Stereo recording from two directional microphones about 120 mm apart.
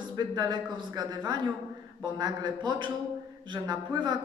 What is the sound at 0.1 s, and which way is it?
Speech, 35° right (ahead or behind).